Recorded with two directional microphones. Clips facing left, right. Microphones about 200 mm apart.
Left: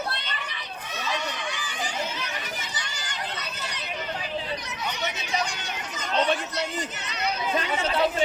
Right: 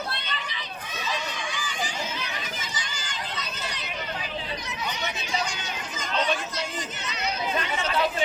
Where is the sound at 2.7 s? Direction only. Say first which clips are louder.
Even; 65° left (ahead or behind).